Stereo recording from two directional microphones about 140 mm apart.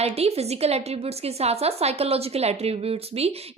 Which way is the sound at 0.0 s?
45° right (ahead or behind).